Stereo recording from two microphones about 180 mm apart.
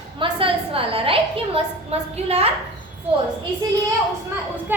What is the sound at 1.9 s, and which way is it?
Speech, 35° right (ahead or behind).